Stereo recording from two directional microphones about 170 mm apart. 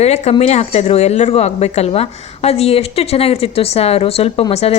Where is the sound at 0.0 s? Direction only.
40° left (ahead or behind).